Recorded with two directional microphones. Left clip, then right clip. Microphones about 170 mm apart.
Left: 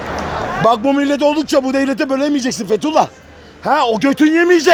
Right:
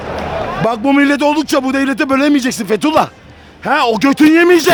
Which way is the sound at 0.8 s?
30° right (ahead or behind).